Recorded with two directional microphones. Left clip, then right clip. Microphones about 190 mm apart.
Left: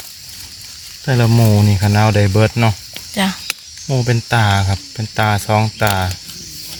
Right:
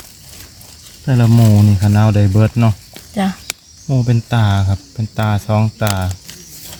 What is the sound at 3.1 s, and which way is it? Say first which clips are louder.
Speech: left 2 dB; 15° right (ahead or behind).